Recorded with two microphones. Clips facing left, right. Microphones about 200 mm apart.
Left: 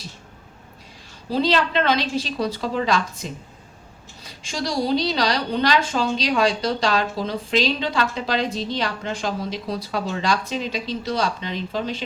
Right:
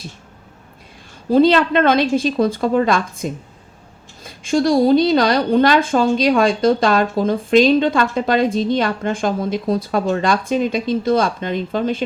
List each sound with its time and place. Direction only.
1.3 s a woman's voice: 55° right (ahead or behind)